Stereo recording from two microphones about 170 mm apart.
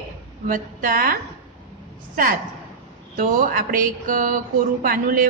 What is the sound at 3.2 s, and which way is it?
A woman's voice, 55° right (ahead or behind).